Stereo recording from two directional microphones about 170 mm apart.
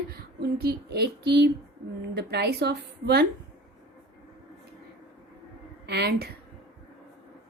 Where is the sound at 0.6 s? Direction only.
70° right (ahead or behind).